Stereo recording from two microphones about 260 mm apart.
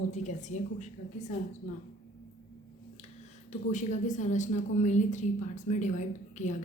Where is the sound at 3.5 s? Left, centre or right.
Left.